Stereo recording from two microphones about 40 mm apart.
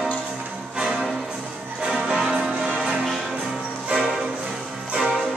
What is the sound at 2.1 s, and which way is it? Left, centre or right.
Music, centre.